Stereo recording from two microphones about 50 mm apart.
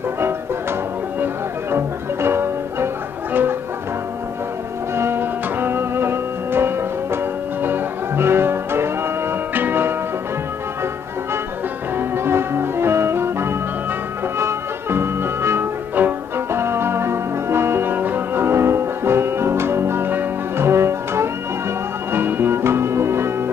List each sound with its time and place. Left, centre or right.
1.2 s music: right
4.9 s music: right
12.0 s music: right
16.0 s music: right
16.3 s music: right
20.6 s music: right
22.1 s music: right